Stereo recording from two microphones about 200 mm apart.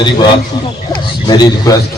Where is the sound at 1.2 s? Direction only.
20° left (ahead or behind).